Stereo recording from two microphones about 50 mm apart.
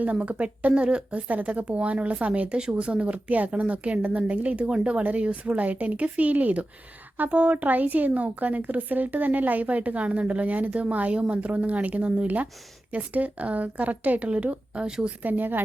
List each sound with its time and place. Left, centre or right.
0.0 s speech: right
14.8 s a woman's voice: centre
15.2 s speech: right